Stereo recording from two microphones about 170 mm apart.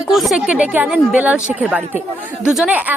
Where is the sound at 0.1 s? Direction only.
Centre (ahead or behind).